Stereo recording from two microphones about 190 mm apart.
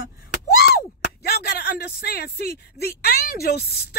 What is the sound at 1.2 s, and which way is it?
Speech, 55° left (ahead or behind).